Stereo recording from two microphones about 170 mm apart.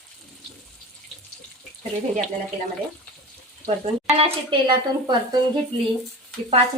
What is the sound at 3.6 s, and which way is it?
Speech, 35° right (ahead or behind).